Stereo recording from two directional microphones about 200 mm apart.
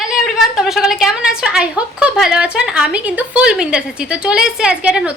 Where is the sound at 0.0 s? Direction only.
Centre (ahead or behind).